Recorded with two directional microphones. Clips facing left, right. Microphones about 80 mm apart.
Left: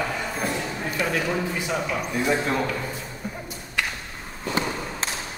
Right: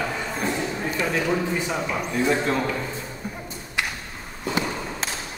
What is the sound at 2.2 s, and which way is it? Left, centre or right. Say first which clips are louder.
Speech: right 1 dB; centre.